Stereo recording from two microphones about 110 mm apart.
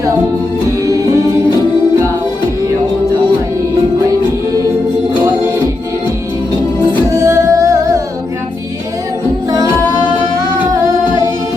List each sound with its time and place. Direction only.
0.9 s music: 30° right (ahead or behind)
7.1 s music: 30° right (ahead or behind)